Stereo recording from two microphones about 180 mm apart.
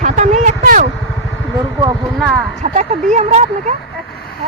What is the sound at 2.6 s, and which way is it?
Speech, 40° right (ahead or behind).